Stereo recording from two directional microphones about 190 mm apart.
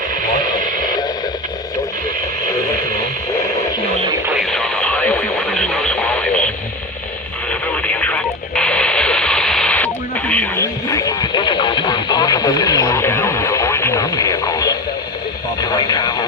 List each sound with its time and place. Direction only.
0.3 s radio: 45° right (ahead or behind)
2.5 s radio: 15° left (ahead or behind)
4.3 s radio: centre (ahead or behind)
7.7 s radio: 5° left (ahead or behind)
15.6 s vehicle: 20° left (ahead or behind)